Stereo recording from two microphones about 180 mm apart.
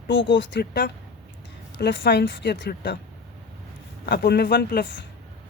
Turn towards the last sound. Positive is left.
turn(degrees=70)  # may be behind; listen again after turning